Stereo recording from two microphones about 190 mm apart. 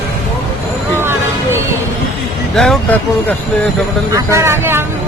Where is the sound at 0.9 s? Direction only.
10° right (ahead or behind).